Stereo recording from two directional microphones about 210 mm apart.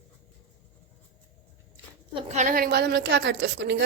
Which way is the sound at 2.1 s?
35° right (ahead or behind).